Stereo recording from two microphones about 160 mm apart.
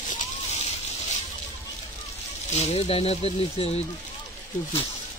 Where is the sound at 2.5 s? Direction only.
40° left (ahead or behind).